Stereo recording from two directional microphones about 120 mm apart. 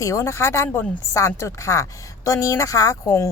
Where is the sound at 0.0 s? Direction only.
25° left (ahead or behind).